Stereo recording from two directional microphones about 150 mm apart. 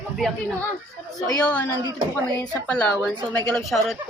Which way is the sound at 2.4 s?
5° left (ahead or behind).